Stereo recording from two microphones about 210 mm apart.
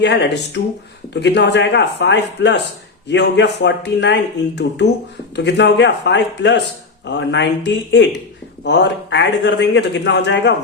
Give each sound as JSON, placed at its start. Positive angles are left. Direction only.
{"t": 0.0, "sound": "a man's voice", "side_deg": 55}